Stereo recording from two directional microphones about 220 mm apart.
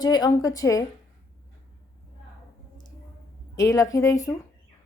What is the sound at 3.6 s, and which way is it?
Speech, 15° left (ahead or behind).